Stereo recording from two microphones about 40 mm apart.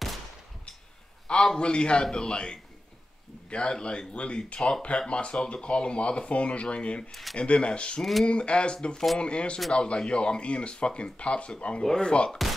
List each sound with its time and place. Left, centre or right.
1.2 s a sound: centre
1.6 s speech: left
7.1 s speech: centre
7.3 s speech: left
8.0 s speech: centre
8.3 s speech: left